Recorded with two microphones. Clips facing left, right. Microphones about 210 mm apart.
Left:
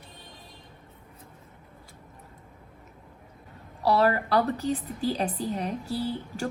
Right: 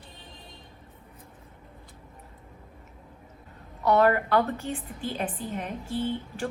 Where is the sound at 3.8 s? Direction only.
35° left (ahead or behind).